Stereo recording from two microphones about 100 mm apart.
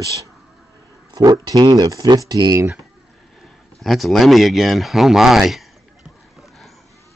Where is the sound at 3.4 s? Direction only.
Centre (ahead or behind).